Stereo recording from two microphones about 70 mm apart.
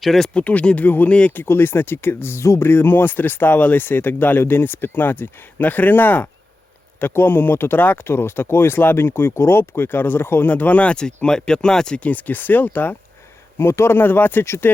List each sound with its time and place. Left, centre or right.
0.0 s speech: centre
0.3 s speech: centre
1.4 s speech: left
13.6 s speech: left